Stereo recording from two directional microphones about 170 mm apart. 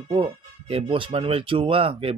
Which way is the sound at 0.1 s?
35° right (ahead or behind).